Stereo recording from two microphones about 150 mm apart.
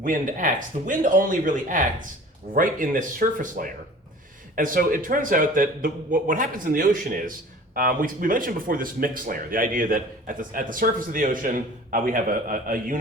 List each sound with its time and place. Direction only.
0.0 s speech: 65° right (ahead or behind)